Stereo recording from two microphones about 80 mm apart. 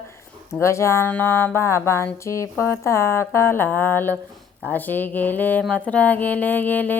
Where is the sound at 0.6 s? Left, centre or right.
Left.